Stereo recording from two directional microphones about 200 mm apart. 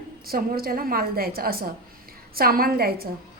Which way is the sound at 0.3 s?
50° right (ahead or behind).